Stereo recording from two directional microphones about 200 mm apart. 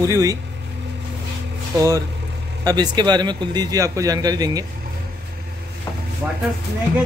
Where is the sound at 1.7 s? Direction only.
15° right (ahead or behind).